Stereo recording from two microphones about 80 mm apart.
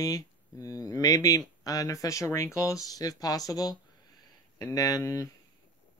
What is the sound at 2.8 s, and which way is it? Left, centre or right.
Speech, left.